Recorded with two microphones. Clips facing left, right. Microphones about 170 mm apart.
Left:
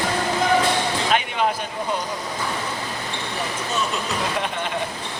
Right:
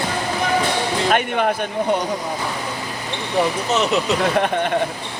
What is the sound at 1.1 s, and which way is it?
Speech, 55° right (ahead or behind).